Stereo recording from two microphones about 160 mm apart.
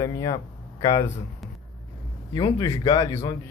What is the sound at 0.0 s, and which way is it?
Speech, 20° left (ahead or behind).